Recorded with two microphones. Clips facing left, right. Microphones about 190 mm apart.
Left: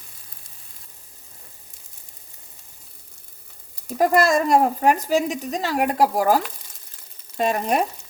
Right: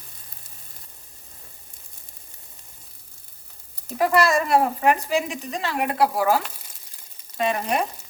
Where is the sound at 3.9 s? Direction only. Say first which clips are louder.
Left 2 dB; 45° left (ahead or behind).